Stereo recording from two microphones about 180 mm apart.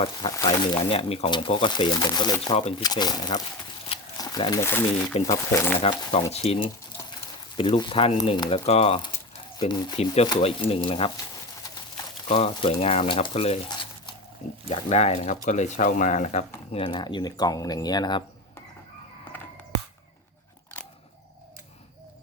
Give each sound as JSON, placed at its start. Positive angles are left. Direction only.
{"t": 0.2, "sound": "speech", "side_deg": 25}
{"t": 2.5, "sound": "speech", "side_deg": 35}
{"t": 2.8, "sound": "speech", "side_deg": 20}
{"t": 4.2, "sound": "a sound", "side_deg": 20}
{"t": 4.6, "sound": "speech", "side_deg": 10}
{"t": 5.8, "sound": "speech", "side_deg": 35}
{"t": 12.3, "sound": "speech", "side_deg": 35}
{"t": 14.7, "sound": "speech", "side_deg": 35}
{"t": 16.7, "sound": "speech", "side_deg": 25}